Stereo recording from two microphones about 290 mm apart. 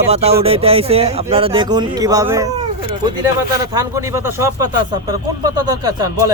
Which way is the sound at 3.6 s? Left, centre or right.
Centre.